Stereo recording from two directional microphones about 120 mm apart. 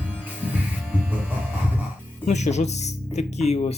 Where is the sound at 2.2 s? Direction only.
70° left (ahead or behind).